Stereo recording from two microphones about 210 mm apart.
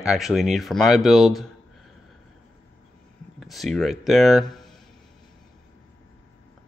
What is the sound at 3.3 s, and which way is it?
Speech, centre (ahead or behind).